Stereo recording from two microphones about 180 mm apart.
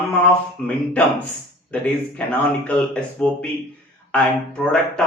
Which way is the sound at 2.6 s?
5° left (ahead or behind).